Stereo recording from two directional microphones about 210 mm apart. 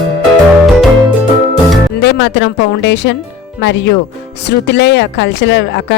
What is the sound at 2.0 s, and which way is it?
Music, 55° left (ahead or behind).